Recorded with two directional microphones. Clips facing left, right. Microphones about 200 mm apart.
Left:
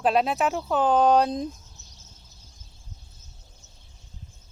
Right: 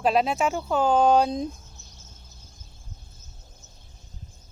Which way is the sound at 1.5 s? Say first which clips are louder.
Even; 50° right (ahead or behind).